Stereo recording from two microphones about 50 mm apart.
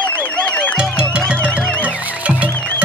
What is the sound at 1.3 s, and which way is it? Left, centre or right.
Music, left.